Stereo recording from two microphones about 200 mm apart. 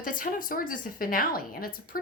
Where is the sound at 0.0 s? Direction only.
45° left (ahead or behind).